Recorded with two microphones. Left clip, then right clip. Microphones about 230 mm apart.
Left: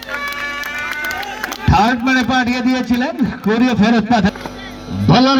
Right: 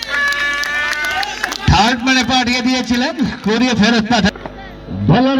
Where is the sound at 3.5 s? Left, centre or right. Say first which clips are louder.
Right 1 dB; left.